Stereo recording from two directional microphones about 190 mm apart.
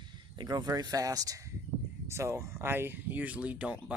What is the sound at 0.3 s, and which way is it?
Speech, 20° right (ahead or behind).